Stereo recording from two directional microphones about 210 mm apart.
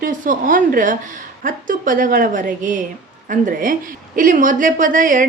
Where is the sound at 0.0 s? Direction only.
40° right (ahead or behind).